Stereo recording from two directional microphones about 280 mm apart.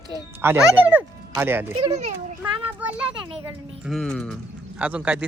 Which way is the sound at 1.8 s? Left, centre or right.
Right.